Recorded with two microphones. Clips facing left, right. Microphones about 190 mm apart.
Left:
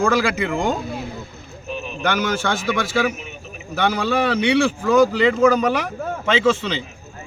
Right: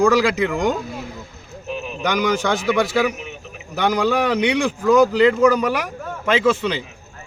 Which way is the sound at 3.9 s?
15° right (ahead or behind).